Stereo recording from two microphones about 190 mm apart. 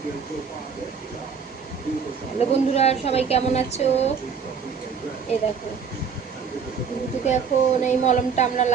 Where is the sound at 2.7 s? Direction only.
35° left (ahead or behind).